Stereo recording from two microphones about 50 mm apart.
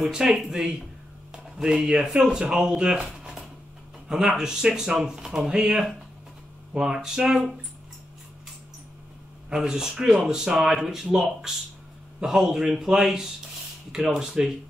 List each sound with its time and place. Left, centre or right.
0.1 s speech: centre
9.5 s speech: centre